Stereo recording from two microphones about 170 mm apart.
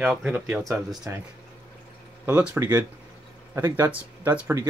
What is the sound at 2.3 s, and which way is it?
Speech, 10° right (ahead or behind).